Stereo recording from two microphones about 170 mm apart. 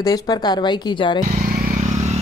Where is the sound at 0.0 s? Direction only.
25° left (ahead or behind).